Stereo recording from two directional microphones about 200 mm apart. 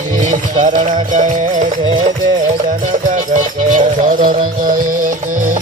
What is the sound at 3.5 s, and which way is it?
Music, 40° right (ahead or behind).